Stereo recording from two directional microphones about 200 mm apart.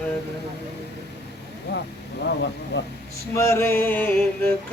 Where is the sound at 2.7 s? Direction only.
60° left (ahead or behind).